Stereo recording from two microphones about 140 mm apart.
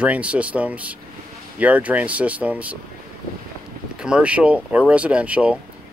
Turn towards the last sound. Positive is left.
turn(degrees=-10)  # may be behind; listen again after turning